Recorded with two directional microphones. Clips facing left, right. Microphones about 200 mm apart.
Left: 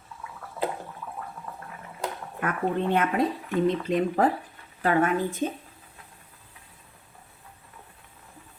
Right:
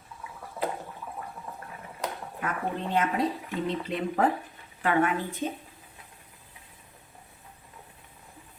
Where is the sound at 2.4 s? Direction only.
60° left (ahead or behind).